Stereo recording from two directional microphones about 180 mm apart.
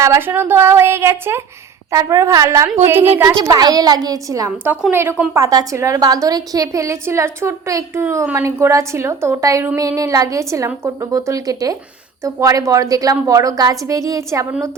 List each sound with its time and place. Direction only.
0.0 s a woman's voice: 15° right (ahead or behind)